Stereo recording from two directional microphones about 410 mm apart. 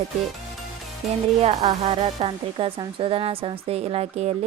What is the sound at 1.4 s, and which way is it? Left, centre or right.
Speech, centre.